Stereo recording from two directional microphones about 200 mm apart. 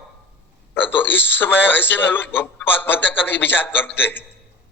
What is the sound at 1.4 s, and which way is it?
A man's voice, 10° left (ahead or behind).